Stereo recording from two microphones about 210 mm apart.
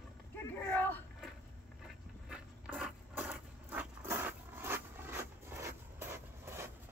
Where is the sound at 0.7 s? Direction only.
10° left (ahead or behind).